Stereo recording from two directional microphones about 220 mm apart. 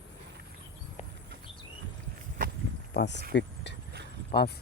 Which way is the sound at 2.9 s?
50° left (ahead or behind).